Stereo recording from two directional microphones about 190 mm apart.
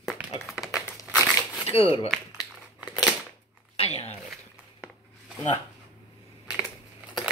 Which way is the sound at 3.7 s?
30° left (ahead or behind).